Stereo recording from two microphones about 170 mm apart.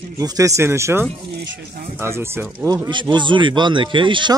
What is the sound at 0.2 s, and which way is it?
Speech, 20° right (ahead or behind).